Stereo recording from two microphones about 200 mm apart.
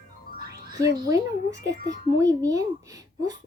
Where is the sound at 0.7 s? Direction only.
15° right (ahead or behind).